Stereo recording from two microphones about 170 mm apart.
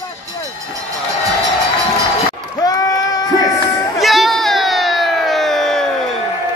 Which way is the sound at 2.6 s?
20° left (ahead or behind).